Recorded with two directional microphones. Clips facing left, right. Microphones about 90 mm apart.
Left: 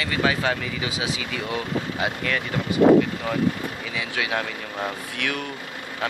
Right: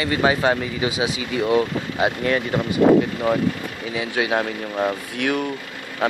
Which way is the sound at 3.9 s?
30° right (ahead or behind).